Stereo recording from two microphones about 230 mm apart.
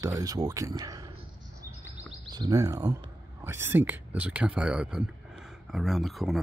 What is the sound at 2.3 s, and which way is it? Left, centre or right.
Speech, centre.